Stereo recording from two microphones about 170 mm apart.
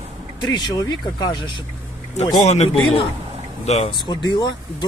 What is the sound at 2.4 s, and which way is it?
Speech, 40° left (ahead or behind).